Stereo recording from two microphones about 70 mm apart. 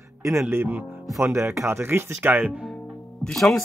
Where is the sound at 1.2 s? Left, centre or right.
Right.